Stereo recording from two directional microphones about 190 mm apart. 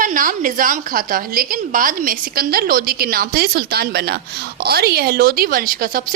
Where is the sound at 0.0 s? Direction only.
45° right (ahead or behind).